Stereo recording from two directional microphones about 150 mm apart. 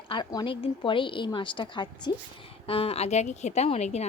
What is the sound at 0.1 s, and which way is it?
A woman's voice, 30° left (ahead or behind).